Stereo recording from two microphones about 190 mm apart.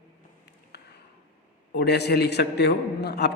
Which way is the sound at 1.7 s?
60° left (ahead or behind).